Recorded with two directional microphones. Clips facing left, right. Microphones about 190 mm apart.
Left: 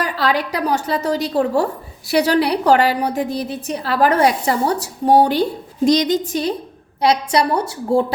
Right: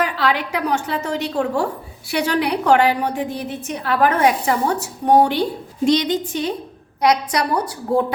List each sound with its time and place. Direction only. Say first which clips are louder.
0.0 s a woman's voice: left 1 dB; 40° left (ahead or behind)
7.0 s a woman's voice: left 2 dB; 30° left (ahead or behind)